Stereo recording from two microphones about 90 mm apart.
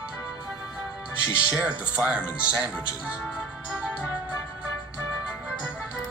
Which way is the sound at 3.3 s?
10° right (ahead or behind).